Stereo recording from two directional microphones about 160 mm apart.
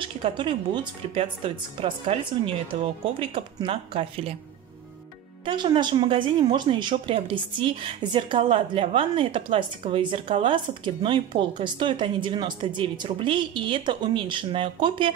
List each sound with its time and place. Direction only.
0.0 s a woman's voice: 30° right (ahead or behind)
5.4 s a woman's voice: 30° right (ahead or behind)